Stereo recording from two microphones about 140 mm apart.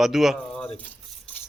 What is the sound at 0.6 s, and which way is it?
Speech, 10° left (ahead or behind).